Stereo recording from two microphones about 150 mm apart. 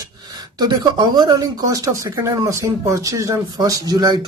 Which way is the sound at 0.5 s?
25° right (ahead or behind).